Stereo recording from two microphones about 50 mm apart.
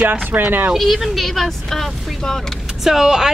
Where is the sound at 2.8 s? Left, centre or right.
Centre.